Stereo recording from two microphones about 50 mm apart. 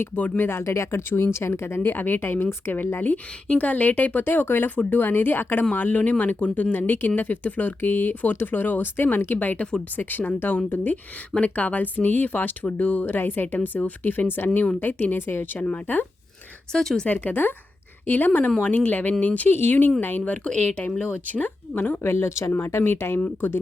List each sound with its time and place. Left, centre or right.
0.0 s speech: left
1.8 s a woman's voice: left
3.4 s speech: left
4.7 s speech: left
4.9 s a woman's voice: left
7.2 s speech: left
11.3 s speech: left
16.7 s speech: centre
17.1 s speech: left
19.5 s a woman's voice: left
20.4 s speech: left
22.0 s speech: left
22.8 s a woman's voice: left
23.2 s a woman's voice: left